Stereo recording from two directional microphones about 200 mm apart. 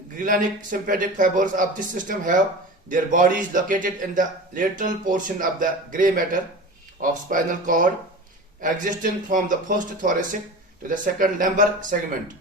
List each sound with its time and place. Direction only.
0.2 s a man's voice: 40° right (ahead or behind)